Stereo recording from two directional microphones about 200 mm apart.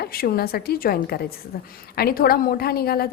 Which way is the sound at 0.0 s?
50° left (ahead or behind).